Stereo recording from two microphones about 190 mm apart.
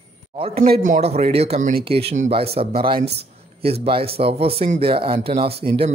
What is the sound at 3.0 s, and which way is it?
Speech, 60° right (ahead or behind).